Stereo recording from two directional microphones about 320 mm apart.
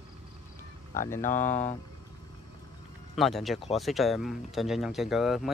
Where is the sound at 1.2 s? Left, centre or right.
Left.